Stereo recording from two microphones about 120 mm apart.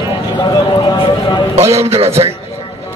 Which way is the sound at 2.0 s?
55° right (ahead or behind).